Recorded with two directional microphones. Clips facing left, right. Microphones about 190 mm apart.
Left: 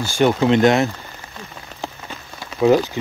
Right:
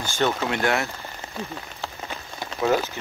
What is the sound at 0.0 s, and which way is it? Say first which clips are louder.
Speech: left 8 dB; 15° left (ahead or behind).